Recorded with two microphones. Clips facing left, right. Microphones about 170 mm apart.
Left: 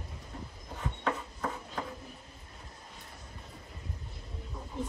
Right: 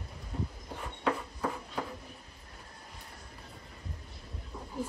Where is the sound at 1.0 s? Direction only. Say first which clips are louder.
Right 3 dB; centre (ahead or behind).